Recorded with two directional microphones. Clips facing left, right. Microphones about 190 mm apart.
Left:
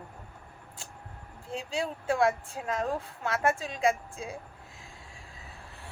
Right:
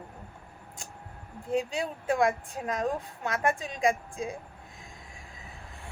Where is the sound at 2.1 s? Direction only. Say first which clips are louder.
Even; 15° right (ahead or behind).